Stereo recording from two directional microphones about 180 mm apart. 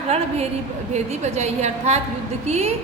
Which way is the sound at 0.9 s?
40° right (ahead or behind).